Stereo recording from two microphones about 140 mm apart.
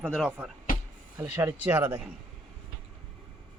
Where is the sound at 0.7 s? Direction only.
90° left.